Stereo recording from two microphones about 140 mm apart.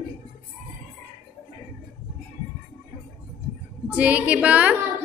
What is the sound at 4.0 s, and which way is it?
Speech, 10° right (ahead or behind).